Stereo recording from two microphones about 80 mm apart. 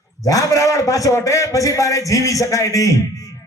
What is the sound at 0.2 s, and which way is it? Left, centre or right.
A man's voice, left.